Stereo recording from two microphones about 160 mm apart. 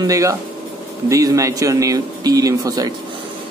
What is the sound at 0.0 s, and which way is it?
Speech, 20° right (ahead or behind).